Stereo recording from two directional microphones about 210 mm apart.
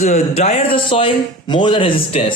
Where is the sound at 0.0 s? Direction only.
30° left (ahead or behind).